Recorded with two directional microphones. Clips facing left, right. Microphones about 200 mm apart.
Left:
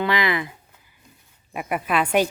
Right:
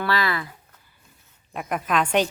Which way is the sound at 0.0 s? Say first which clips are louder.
Left 2 dB; 20° left (ahead or behind).